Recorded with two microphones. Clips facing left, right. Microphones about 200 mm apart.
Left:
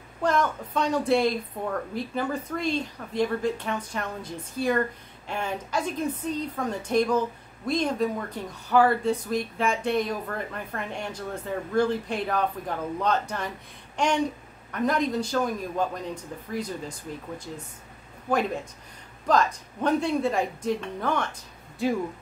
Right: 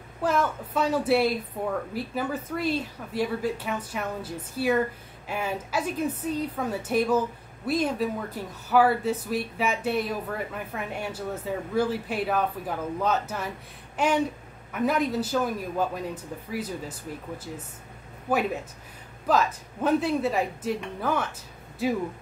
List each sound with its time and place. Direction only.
0.2 s a woman's voice: 5° right (ahead or behind)
13.9 s a sound: 5° right (ahead or behind)
14.7 s a woman's voice: 5° right (ahead or behind)
19.2 s speech: 5° right (ahead or behind)